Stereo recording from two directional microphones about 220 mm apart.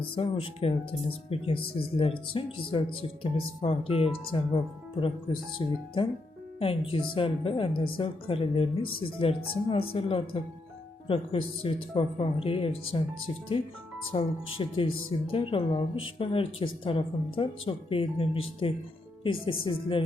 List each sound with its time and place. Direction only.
0.2 s speech: 25° left (ahead or behind)
14.1 s speech: 25° left (ahead or behind)